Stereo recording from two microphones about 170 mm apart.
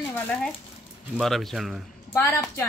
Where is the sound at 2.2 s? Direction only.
15° left (ahead or behind).